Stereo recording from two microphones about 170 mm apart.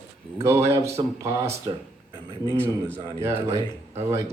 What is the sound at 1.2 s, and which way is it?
Speech, 15° right (ahead or behind).